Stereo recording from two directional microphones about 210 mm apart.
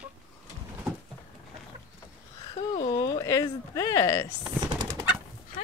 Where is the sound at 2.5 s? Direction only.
30° left (ahead or behind).